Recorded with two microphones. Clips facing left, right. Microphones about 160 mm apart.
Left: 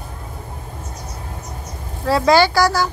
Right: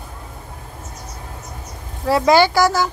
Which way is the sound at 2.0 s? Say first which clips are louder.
Even; 15° right (ahead or behind).